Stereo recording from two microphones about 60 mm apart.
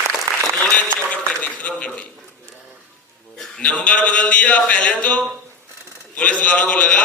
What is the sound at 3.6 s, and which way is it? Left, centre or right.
A man's voice, left.